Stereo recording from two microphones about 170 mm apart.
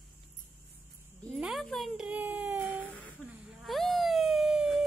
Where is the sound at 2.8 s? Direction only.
10° left (ahead or behind).